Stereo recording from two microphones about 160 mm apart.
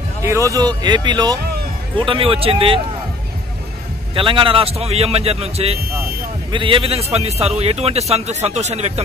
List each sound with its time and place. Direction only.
0.2 s a man's voice: 20° right (ahead or behind); by 2.8 s 35° right (ahead or behind)
4.1 s a man's voice: 30° right (ahead or behind)